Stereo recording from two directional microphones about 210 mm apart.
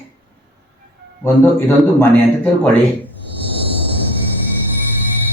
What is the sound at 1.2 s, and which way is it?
Speech, 10° left (ahead or behind).